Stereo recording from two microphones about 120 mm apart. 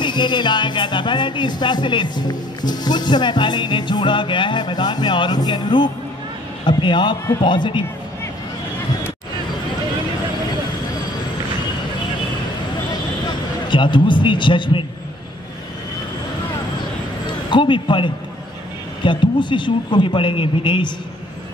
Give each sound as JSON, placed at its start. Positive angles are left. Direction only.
{"t": 0.0, "sound": "a man's voice", "side_deg": 40}
{"t": 13.7, "sound": "speech", "side_deg": 40}
{"t": 17.5, "sound": "speech", "side_deg": 45}